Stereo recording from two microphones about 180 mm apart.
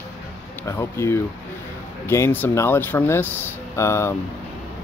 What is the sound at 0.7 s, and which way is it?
Speech, 15° left (ahead or behind).